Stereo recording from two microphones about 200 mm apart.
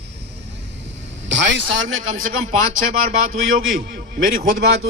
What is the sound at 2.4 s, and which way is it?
A man's voice, 45° right (ahead or behind).